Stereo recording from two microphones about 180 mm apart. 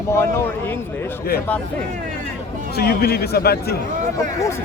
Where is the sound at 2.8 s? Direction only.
60° left (ahead or behind).